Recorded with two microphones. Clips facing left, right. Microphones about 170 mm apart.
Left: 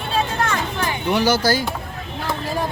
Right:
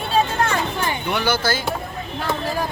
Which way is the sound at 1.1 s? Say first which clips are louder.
Left 5 dB; 35° left (ahead or behind).